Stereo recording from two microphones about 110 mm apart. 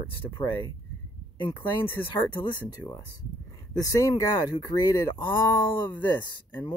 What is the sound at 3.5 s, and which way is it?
Speech, 30° left (ahead or behind).